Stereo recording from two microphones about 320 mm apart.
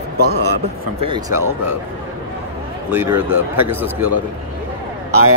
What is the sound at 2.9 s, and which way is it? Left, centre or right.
Speech, centre.